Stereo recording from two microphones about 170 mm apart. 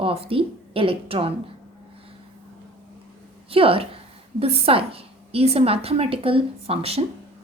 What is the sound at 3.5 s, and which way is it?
A woman's voice, 35° right (ahead or behind).